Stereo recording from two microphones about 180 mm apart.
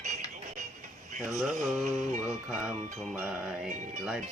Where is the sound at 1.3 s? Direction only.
Centre (ahead or behind).